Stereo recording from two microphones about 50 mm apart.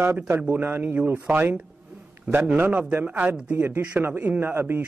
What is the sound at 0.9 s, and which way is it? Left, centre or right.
A man's voice, right.